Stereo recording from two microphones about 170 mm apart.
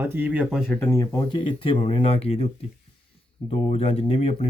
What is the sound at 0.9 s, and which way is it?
Speech, 20° left (ahead or behind).